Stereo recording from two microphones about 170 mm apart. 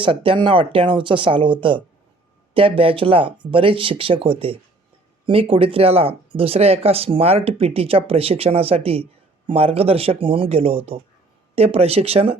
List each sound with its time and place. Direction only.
0.0 s speech: 30° right (ahead or behind)